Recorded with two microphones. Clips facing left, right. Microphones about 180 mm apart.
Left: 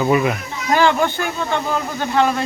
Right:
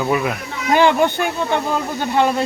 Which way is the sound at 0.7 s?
15° right (ahead or behind).